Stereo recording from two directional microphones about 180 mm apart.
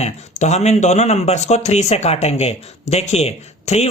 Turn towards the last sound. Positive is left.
turn(degrees=35)  # may be behind; listen again after turning